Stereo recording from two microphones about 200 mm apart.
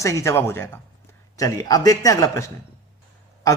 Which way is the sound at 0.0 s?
15° left (ahead or behind).